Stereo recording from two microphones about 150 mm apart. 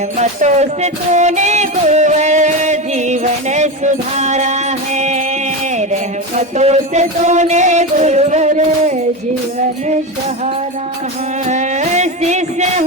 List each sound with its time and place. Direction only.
0.2 s music: 50° right (ahead or behind)
6.6 s music: 45° right (ahead or behind)
11.4 s music: 50° right (ahead or behind)